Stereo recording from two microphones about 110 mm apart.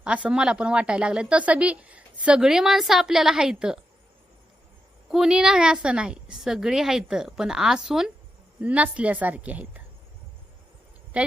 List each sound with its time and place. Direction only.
0.0 s speech: 10° right (ahead or behind)
5.1 s a woman's voice: 5° right (ahead or behind)
11.1 s speech: 10° right (ahead or behind)